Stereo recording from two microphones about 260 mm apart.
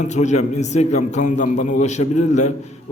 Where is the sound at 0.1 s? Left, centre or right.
Left.